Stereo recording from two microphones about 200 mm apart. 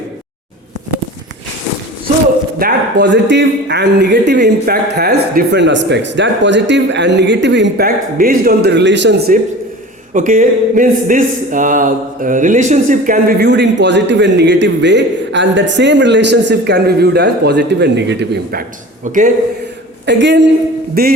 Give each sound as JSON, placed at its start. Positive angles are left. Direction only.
{"t": 2.6, "sound": "speech", "side_deg": -55}
{"t": 19.0, "sound": "a man's voice", "side_deg": -40}
{"t": 20.1, "sound": "speech", "side_deg": -60}
{"t": 21.0, "sound": "a sound", "side_deg": -50}